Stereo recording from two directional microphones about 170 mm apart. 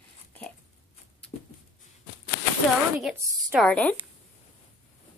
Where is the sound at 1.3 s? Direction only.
60° left (ahead or behind).